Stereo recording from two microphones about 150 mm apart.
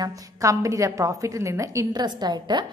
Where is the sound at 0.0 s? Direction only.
20° right (ahead or behind).